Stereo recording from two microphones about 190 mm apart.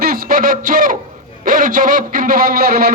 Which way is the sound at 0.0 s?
50° right (ahead or behind).